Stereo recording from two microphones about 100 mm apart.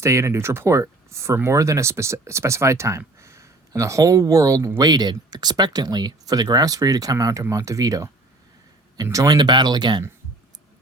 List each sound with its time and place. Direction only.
0.0 s speech: 30° right (ahead or behind)
9.1 s speech: 45° right (ahead or behind)